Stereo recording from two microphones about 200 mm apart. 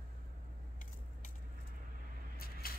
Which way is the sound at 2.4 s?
50° left (ahead or behind).